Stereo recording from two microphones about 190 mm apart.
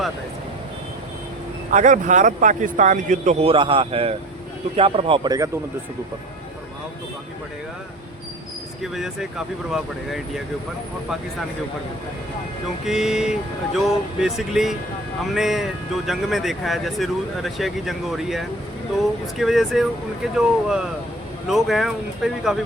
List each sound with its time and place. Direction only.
1.7 s a man's voice: 40° right (ahead or behind); by 5.5 s 20° right (ahead or behind)
9.7 s speech: centre (ahead or behind)
12.8 s speech: centre (ahead or behind)